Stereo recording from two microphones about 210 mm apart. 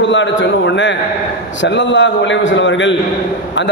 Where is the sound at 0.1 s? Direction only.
60° left (ahead or behind).